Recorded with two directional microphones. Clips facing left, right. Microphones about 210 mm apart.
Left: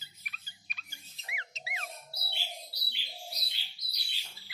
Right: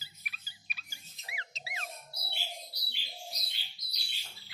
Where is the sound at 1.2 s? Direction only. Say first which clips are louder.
Even; 35° right (ahead or behind).